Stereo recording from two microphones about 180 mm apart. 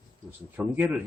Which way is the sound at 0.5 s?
10° right (ahead or behind).